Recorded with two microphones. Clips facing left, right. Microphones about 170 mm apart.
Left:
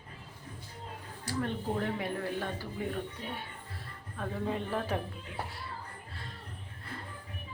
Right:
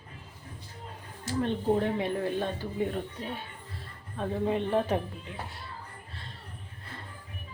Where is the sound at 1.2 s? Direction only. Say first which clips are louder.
Right 6 dB; 25° right (ahead or behind).